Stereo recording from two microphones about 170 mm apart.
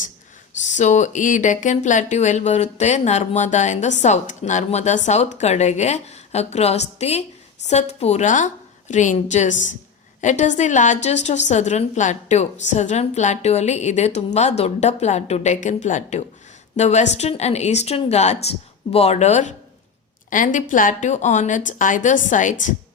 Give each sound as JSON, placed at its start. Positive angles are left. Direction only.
{"t": 0.8, "sound": "a woman's voice", "side_deg": 45}